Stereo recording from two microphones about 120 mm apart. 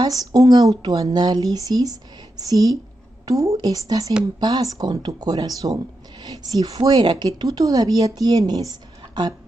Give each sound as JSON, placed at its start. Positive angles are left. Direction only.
{"t": 0.0, "sound": "speech", "side_deg": -30}